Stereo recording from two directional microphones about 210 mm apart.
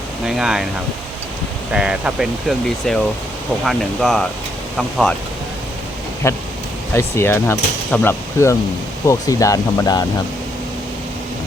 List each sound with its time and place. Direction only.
0.3 s speech: centre (ahead or behind)
1.7 s speech: 5° right (ahead or behind)
6.2 s speech: 15° left (ahead or behind)